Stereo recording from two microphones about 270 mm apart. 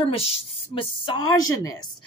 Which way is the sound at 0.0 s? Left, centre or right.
Left.